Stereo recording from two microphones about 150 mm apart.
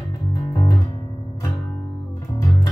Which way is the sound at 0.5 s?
30° left (ahead or behind).